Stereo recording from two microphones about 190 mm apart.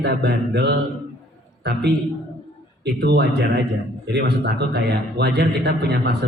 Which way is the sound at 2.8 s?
60° right (ahead or behind).